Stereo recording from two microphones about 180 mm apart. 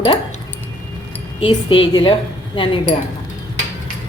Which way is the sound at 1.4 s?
30° left (ahead or behind).